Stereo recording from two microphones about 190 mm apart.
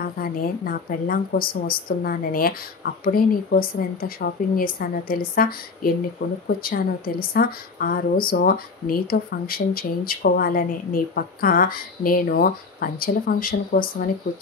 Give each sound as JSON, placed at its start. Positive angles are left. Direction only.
{"t": 0.0, "sound": "a woman's voice", "side_deg": 50}